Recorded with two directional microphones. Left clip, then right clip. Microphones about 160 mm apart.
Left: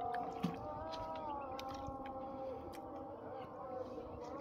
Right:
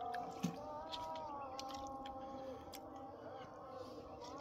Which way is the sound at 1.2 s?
55° left (ahead or behind).